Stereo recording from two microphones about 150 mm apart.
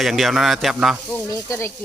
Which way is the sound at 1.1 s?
20° left (ahead or behind).